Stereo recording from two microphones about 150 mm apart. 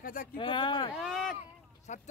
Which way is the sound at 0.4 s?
35° left (ahead or behind).